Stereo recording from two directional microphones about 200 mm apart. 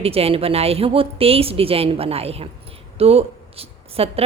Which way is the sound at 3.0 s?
30° right (ahead or behind).